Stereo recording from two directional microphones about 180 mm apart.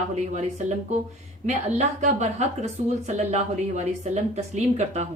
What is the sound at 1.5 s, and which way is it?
A woman's voice, 45° right (ahead or behind).